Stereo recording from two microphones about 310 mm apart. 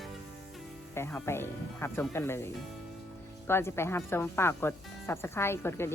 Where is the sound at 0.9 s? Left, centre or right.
Centre.